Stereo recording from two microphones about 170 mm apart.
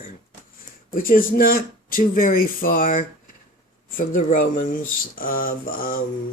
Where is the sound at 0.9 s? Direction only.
55° left (ahead or behind).